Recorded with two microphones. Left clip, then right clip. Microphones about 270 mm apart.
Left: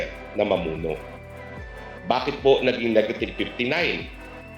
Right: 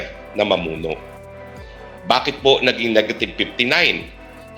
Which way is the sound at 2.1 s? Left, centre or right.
Right.